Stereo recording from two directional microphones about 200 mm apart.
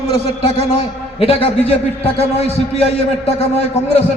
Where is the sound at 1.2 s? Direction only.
30° left (ahead or behind).